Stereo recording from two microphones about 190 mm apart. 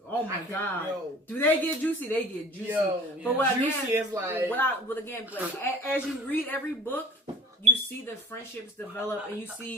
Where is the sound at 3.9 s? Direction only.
15° right (ahead or behind).